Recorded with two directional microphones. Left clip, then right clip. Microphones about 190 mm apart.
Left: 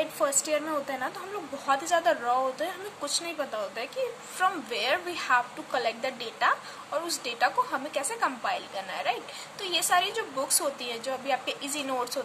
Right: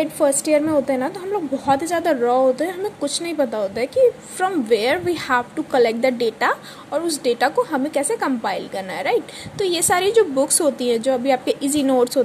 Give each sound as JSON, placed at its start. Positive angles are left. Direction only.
{"t": 0.2, "sound": "a woman's voice", "side_deg": -30}